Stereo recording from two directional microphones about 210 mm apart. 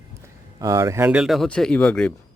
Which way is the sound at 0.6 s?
15° right (ahead or behind).